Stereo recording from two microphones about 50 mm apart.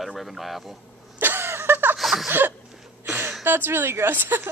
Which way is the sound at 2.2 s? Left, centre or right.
Right.